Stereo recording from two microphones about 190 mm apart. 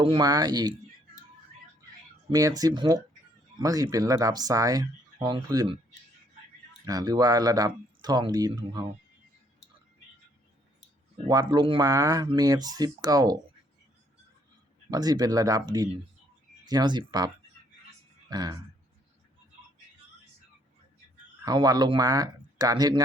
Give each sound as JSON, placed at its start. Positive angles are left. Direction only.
{"t": 0.0, "sound": "speech", "side_deg": -25}
{"t": 2.3, "sound": "speech", "side_deg": -20}
{"t": 6.8, "sound": "speech", "side_deg": -20}
{"t": 11.3, "sound": "speech", "side_deg": -20}
{"t": 14.8, "sound": "speech", "side_deg": -20}
{"t": 21.4, "sound": "speech", "side_deg": -20}